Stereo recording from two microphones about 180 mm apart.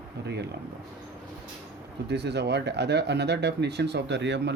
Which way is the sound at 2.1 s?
70° right (ahead or behind).